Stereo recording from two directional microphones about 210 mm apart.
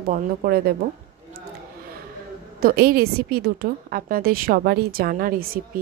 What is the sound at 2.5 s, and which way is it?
A woman's voice, 45° right (ahead or behind).